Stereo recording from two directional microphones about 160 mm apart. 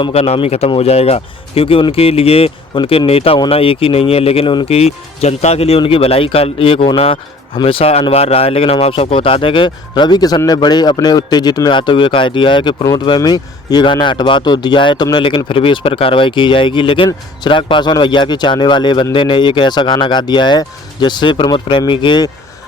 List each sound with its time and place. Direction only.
0.0 s a man's voice: 40° left (ahead or behind)